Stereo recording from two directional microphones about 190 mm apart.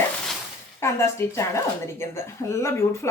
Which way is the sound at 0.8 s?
15° left (ahead or behind).